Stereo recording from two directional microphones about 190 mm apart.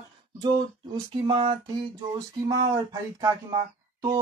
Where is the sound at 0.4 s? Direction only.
25° right (ahead or behind).